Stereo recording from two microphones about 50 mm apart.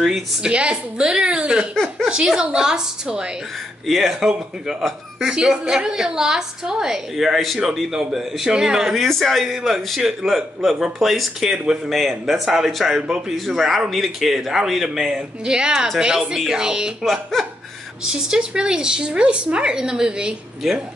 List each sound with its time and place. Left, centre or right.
0.0 s a woman's voice: centre
0.5 s a woman's voice: right
3.8 s a woman's voice: centre
7.2 s a woman's voice: centre
9.0 s a woman's voice: centre
17.0 s speech: centre
18.0 s a woman's voice: centre
20.6 s speech: centre